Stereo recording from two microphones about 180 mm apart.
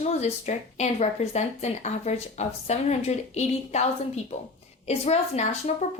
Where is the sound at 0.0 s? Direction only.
40° left (ahead or behind).